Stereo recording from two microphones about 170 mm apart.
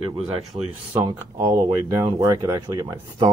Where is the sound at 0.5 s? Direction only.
25° right (ahead or behind).